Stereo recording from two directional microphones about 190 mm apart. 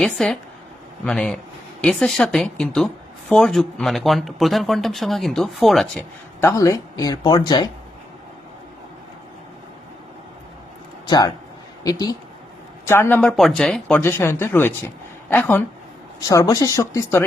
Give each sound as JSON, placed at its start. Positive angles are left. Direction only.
{"t": 0.0, "sound": "a woman's voice", "side_deg": 0}
{"t": 6.4, "sound": "speech", "side_deg": 15}
{"t": 11.0, "sound": "speech", "side_deg": 20}